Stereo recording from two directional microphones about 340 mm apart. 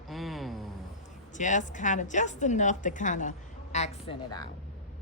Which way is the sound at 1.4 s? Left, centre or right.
Left.